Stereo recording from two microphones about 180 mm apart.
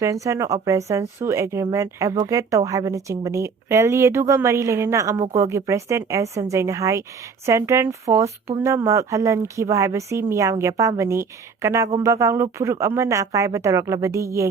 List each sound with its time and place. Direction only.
0.0 s speech: 15° right (ahead or behind)